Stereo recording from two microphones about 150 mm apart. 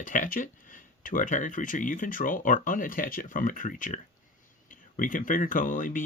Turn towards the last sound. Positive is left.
turn(degrees=65)  # may be behind; listen again after turning